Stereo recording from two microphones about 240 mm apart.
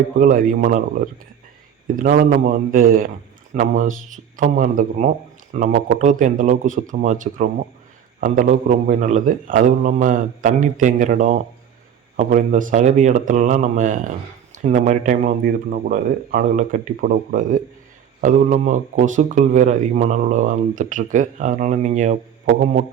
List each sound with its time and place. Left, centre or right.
0.2 s speech: right